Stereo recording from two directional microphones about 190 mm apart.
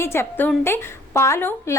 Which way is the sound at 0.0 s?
10° left (ahead or behind).